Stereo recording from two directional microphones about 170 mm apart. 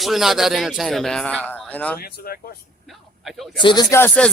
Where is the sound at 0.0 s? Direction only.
Centre (ahead or behind).